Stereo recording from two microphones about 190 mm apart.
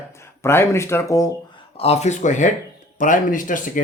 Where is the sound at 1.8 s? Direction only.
35° left (ahead or behind).